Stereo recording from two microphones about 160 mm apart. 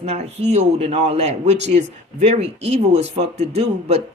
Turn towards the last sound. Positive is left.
turn(degrees=-40)  # may be behind; listen again after turning